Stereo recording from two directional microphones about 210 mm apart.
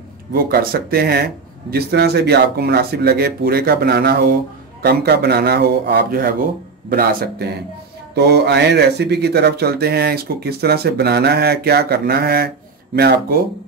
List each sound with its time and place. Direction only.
0.3 s speech: 45° right (ahead or behind)